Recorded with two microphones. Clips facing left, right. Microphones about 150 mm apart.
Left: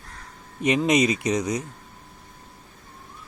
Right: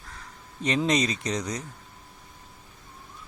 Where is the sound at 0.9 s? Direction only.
10° left (ahead or behind).